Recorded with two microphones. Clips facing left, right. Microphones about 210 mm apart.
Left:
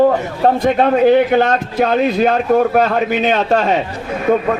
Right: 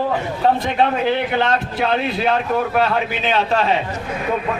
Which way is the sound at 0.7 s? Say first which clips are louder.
Left 7 dB; 50° left (ahead or behind).